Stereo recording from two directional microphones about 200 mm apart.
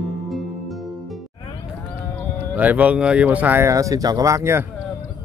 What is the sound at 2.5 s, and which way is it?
Speech, 10° right (ahead or behind).